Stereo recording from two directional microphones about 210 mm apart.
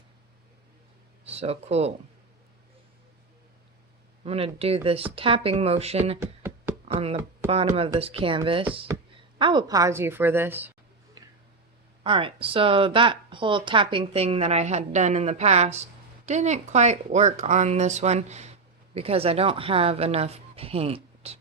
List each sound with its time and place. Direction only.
1.2 s speech: 30° right (ahead or behind)
4.2 s speech: 30° right (ahead or behind)
6.1 s a sound: 10° right (ahead or behind)
6.8 s speech: 30° right (ahead or behind)
8.9 s a sound: 15° right (ahead or behind)
9.4 s a woman's voice: 20° right (ahead or behind)
12.0 s speech: 25° right (ahead or behind)